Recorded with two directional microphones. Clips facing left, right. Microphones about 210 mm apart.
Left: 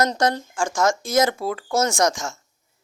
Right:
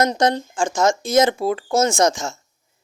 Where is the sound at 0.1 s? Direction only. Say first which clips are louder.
Right 3 dB; 20° right (ahead or behind).